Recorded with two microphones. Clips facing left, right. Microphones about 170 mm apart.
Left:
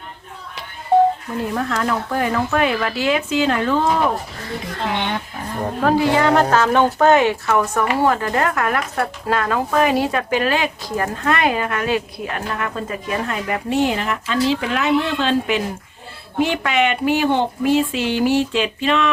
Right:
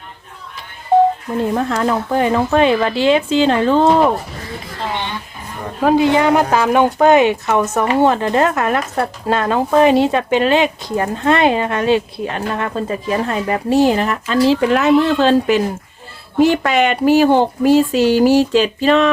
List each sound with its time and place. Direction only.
1.5 s speech: 25° right (ahead or behind)
5.8 s speech: 20° right (ahead or behind); by 19.1 s 35° right (ahead or behind)